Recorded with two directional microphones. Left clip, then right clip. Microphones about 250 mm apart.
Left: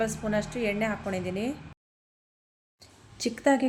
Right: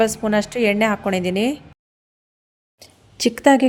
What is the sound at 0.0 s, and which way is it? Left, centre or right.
Speech, right.